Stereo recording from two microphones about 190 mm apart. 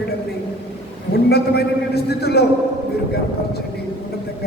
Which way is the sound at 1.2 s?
55° left (ahead or behind).